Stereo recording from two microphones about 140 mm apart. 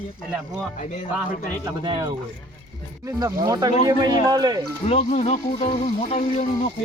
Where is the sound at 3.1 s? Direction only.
25° right (ahead or behind).